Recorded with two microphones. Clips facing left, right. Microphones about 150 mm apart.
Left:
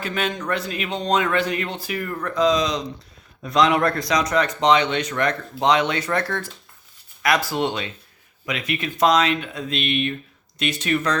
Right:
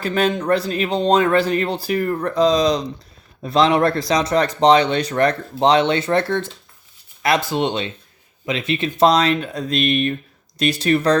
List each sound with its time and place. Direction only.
0.0 s speech: 35° right (ahead or behind)